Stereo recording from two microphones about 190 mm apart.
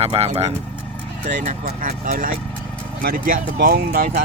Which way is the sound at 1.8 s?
40° right (ahead or behind).